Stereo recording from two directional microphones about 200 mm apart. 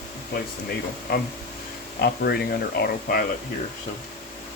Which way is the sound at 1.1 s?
50° left (ahead or behind).